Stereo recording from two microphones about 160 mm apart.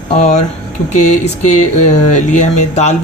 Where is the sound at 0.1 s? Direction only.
45° left (ahead or behind).